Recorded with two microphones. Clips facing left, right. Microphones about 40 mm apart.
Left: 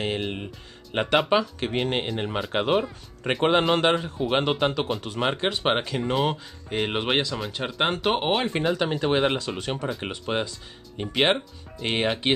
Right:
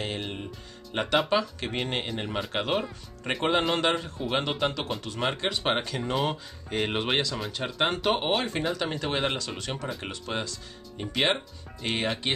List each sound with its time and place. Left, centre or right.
0.0 s speech: centre